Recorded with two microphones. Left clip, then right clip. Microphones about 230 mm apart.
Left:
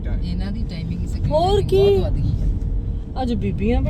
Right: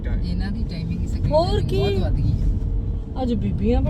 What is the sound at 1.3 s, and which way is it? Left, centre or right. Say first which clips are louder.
Speech: left 3 dB; centre.